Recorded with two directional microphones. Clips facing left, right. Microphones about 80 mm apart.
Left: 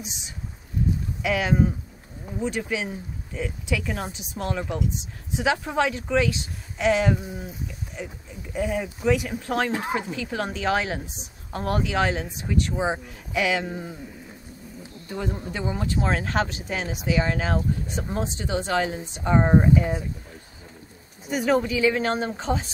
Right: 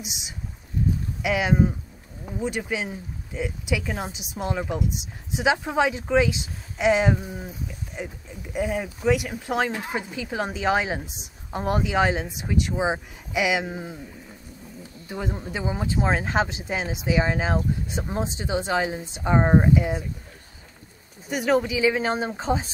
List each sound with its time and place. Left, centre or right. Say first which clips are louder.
1.2 s speech: right 1 dB; centre
8.5 s speech: even; centre
15.0 s a woman's voice: even; centre
21.3 s speech: even; centre